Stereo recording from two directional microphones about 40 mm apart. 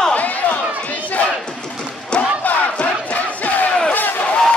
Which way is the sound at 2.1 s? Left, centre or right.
Left.